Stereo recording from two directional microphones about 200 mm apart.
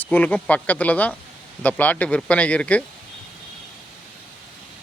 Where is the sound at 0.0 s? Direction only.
10° left (ahead or behind).